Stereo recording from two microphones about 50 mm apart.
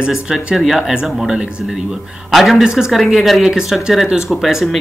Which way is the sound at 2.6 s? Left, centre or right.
Centre.